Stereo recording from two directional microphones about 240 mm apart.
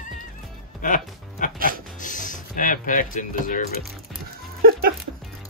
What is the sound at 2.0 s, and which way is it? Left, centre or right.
Speech, left.